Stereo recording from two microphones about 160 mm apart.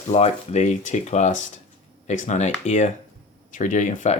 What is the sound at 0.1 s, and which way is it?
Speech, 40° left (ahead or behind).